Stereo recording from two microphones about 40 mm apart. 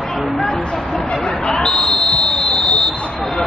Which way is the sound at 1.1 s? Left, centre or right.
Left.